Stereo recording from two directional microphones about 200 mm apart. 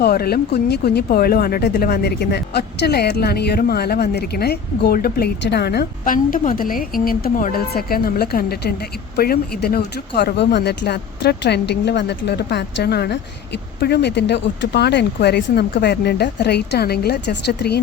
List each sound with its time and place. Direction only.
0.0 s speech: 50° left (ahead or behind)